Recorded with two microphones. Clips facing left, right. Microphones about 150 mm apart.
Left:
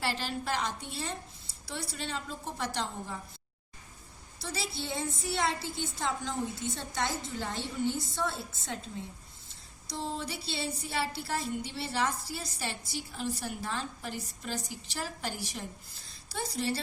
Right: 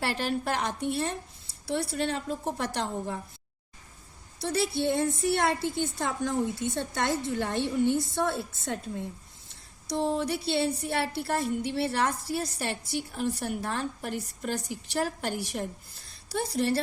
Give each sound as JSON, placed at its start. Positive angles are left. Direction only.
{"t": 0.0, "sound": "a woman's voice", "side_deg": -55}
{"t": 4.4, "sound": "a woman's voice", "side_deg": -55}